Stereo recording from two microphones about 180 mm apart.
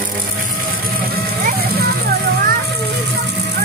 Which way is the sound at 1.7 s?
60° right (ahead or behind).